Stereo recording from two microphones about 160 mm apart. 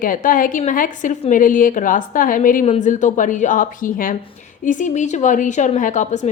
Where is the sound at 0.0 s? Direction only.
60° left (ahead or behind).